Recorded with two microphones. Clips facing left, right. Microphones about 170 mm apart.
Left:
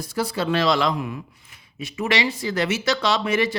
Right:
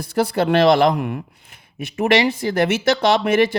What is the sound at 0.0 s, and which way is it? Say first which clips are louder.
Speech: right 6 dB; 60° right (ahead or behind).